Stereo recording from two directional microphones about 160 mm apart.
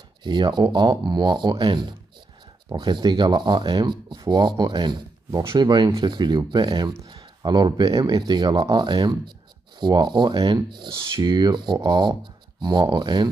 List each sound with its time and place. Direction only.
0.2 s speech: 30° right (ahead or behind)
5.4 s speech: 15° right (ahead or behind)
5.7 s speech: 30° right (ahead or behind)